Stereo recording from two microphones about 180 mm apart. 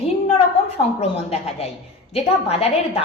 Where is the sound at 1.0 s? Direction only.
35° left (ahead or behind).